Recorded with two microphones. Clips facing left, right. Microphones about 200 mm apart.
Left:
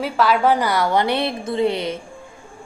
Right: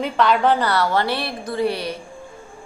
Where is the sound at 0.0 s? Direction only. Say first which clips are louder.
Even; 5° left (ahead or behind); by 2.0 s 20° left (ahead or behind).